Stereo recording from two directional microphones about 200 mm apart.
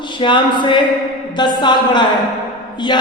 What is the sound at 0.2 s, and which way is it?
Speech, 25° left (ahead or behind).